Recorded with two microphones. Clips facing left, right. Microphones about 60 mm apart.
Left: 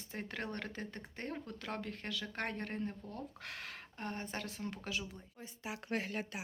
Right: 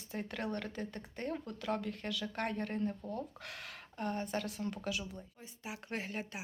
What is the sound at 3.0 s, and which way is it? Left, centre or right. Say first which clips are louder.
Speech: right 6 dB; right.